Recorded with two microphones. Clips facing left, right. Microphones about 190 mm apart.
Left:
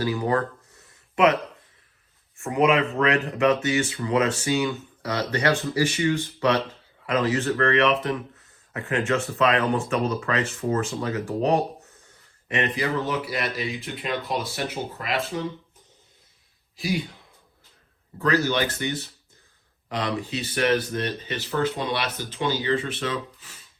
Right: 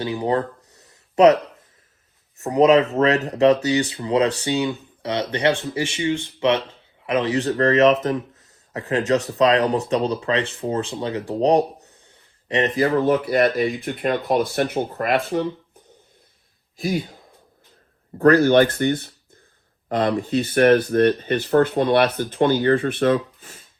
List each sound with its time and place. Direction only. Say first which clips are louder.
0.0 s speech: right 2 dB; 30° right (ahead or behind)
2.3 s speech: right 6 dB; 40° right (ahead or behind); by 15.4 s 55° right (ahead or behind)
18.2 s speech: right 9 dB; 55° right (ahead or behind)